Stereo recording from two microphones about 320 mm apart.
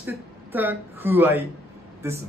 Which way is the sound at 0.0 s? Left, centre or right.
Centre.